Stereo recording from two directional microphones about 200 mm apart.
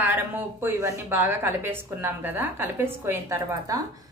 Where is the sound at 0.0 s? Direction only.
10° right (ahead or behind).